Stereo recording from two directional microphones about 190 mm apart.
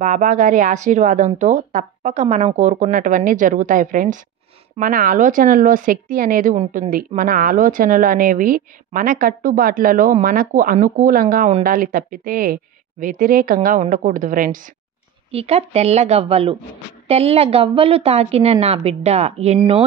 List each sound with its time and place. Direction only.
0.0 s a woman's voice: 40° right (ahead or behind)
15.3 s a woman's voice: 30° right (ahead or behind)